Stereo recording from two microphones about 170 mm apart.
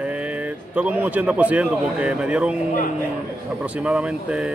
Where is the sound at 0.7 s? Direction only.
10° right (ahead or behind).